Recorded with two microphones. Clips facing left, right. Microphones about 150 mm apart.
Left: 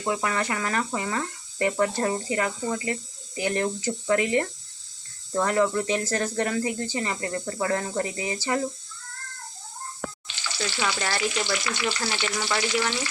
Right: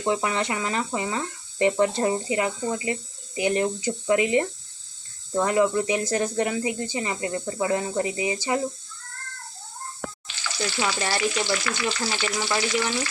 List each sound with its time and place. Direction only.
0.1 s speech: 20° right (ahead or behind)
10.6 s speech: 20° right (ahead or behind)